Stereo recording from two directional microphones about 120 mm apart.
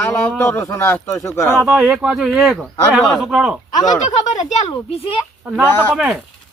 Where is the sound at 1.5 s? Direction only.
10° right (ahead or behind).